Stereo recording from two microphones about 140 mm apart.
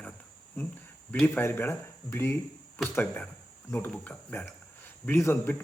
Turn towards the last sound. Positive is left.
turn(degrees=15)  # may be behind; listen again after turning